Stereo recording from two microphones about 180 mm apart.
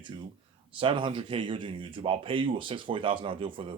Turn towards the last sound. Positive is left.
turn(degrees=-30)  # may be behind; listen again after turning